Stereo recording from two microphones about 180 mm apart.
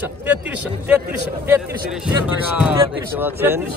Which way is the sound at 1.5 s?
10° right (ahead or behind).